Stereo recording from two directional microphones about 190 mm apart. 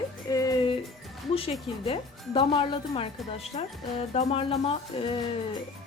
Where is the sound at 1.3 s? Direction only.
30° left (ahead or behind).